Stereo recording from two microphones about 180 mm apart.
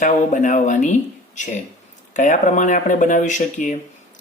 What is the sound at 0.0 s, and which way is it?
Speech, 45° left (ahead or behind).